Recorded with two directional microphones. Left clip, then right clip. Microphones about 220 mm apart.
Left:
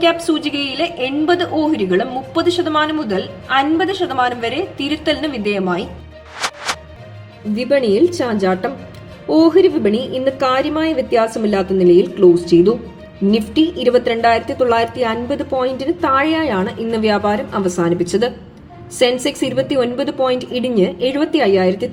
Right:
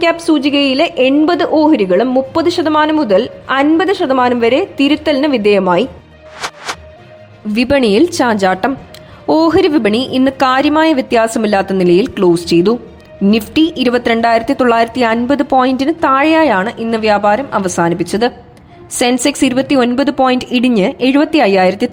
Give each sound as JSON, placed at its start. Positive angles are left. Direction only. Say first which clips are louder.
{"t": 0.0, "sound": "a woman's voice", "louder": "right 3 dB", "side_deg": -35}
{"t": 6.4, "sound": "music", "louder": "left 1 dB", "side_deg": 0}
{"t": 7.5, "sound": "a woman's voice", "louder": "right 4 dB", "side_deg": -50}